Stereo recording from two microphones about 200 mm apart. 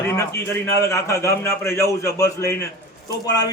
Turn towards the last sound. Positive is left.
turn(degrees=20)  # may be behind; listen again after turning